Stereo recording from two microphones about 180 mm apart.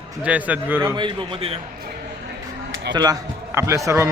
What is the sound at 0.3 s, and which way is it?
Speech, 10° right (ahead or behind).